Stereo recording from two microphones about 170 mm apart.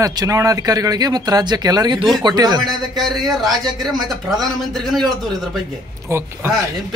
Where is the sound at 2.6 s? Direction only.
Centre (ahead or behind).